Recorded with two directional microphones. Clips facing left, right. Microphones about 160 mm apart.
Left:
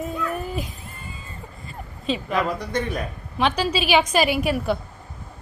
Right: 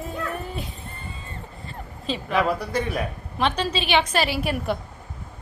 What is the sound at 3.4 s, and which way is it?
A woman's voice, 5° left (ahead or behind).